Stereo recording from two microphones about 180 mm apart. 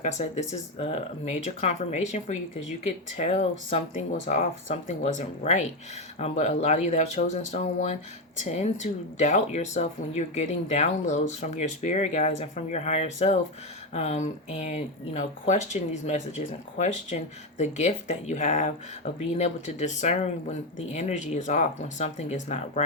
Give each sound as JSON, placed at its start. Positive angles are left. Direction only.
{"t": 0.0, "sound": "speech", "side_deg": 40}